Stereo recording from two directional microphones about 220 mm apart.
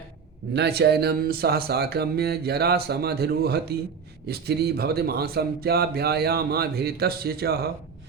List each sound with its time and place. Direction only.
0.5 s speech: 50° right (ahead or behind)